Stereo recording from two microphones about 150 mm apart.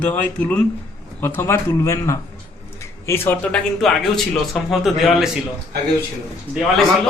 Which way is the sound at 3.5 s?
Centre (ahead or behind).